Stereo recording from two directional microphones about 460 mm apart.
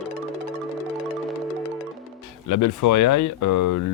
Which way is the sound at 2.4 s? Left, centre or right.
Left.